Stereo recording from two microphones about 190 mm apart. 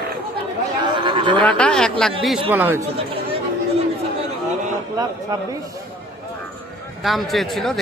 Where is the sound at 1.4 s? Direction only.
5° left (ahead or behind).